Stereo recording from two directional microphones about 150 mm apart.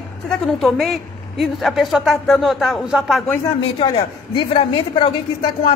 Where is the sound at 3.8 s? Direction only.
30° left (ahead or behind).